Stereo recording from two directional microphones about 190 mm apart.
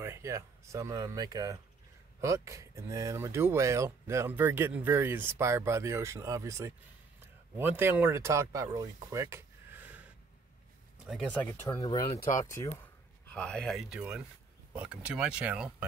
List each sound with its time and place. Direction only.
0.0 s speech: 15° right (ahead or behind)
11.1 s speech: centre (ahead or behind)
11.6 s speech: 20° left (ahead or behind); by 15.7 s 5° right (ahead or behind)